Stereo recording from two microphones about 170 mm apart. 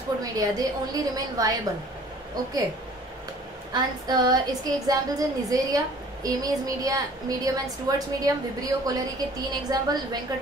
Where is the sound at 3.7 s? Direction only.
25° right (ahead or behind).